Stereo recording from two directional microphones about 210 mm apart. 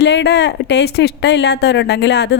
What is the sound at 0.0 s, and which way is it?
Speech, 55° left (ahead or behind).